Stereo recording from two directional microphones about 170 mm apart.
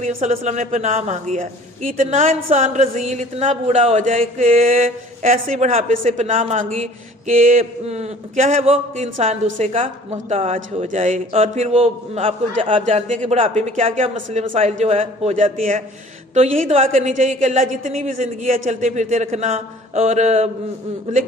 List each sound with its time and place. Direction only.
0.0 s a woman's voice: 40° right (ahead or behind)
6.6 s a woman's voice: 50° right (ahead or behind)
16.3 s a woman's voice: 40° right (ahead or behind)